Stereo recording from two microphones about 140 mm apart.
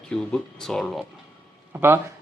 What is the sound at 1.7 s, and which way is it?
Speech, 15° right (ahead or behind).